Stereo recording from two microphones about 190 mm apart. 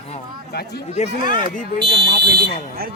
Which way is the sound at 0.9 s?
45° left (ahead or behind).